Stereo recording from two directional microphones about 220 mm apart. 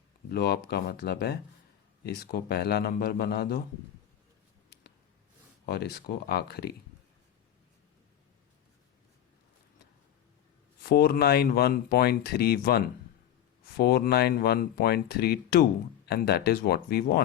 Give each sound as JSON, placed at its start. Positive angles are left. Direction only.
{"t": 0.3, "sound": "speech", "side_deg": 45}
{"t": 5.6, "sound": "speech", "side_deg": 45}
{"t": 10.8, "sound": "speech", "side_deg": 45}